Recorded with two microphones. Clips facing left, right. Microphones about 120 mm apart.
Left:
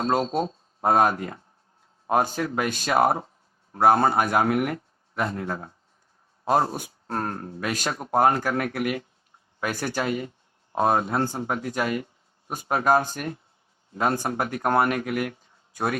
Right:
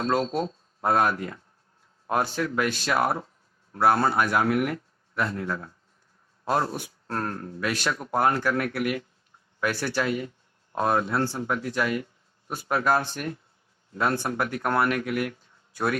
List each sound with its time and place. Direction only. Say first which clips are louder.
0.0 s speech: left 1 dB; 25° left (ahead or behind)
0.9 s speech: left 3 dB; 40° left (ahead or behind)
4.5 s speech: left 1 dB; 30° left (ahead or behind)
7.6 s speech: right 1 dB; 40° left (ahead or behind)
8.8 s speech: left 1 dB; 30° left (ahead or behind)
9.6 s speech: right 1 dB; 40° left (ahead or behind)
10.0 s a man's voice: even; 30° left (ahead or behind)